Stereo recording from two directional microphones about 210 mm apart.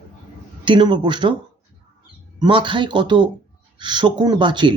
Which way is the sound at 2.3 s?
20° right (ahead or behind).